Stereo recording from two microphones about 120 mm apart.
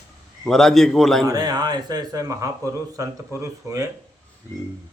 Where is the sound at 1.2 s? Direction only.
35° right (ahead or behind).